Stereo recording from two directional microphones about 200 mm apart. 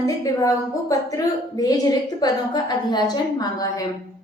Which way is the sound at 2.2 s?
20° left (ahead or behind).